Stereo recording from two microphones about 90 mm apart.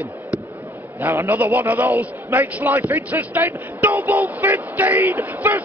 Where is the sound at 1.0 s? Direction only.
20° right (ahead or behind).